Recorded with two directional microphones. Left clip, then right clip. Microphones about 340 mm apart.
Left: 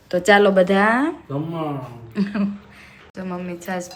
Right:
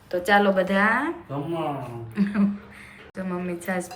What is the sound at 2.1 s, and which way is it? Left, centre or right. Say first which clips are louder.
A woman's voice: left 1 dB; centre.